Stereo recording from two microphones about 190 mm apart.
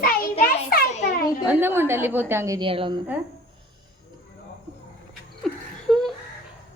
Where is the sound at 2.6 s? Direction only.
25° right (ahead or behind).